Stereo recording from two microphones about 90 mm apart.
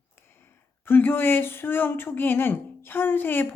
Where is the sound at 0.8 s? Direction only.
25° left (ahead or behind).